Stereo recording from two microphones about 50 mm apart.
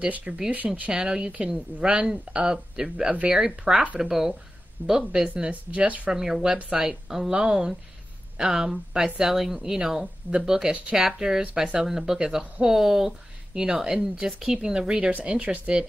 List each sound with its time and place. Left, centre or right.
0.0 s speech: right
0.9 s speech: centre
5.3 s speech: right
6.1 s speech: centre; by 15.8 s right